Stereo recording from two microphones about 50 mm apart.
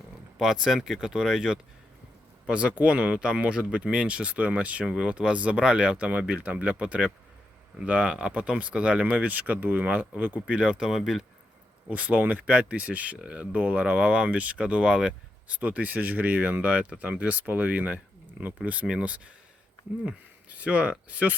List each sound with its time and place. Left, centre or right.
0.3 s speech: centre; by 10.4 s right
10.4 s speech: right; by 11.3 s centre
11.9 s speech: right
16.6 s speech: right